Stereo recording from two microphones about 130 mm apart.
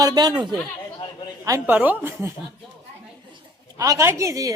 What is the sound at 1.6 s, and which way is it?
Speech, 10° right (ahead or behind).